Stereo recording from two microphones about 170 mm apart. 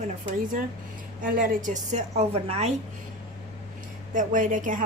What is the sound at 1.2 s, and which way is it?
A woman's voice, 50° right (ahead or behind).